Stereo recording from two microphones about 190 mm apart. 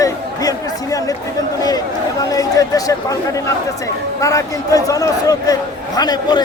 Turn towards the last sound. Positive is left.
turn(degrees=20)  # may be behind; listen again after turning